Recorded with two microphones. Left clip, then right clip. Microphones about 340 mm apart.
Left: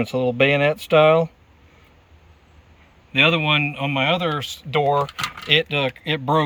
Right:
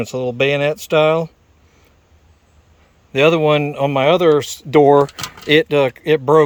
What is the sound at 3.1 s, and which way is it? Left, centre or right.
Speech, centre.